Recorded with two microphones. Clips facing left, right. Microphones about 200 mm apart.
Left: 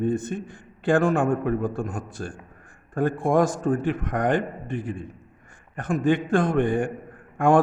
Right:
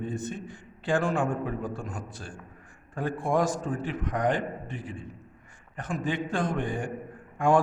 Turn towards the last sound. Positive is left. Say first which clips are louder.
# left 4 dB
turn(degrees=55)  # may be behind; listen again after turning